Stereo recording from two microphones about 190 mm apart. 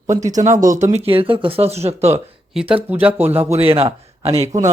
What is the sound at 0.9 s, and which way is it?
Speech, 30° right (ahead or behind).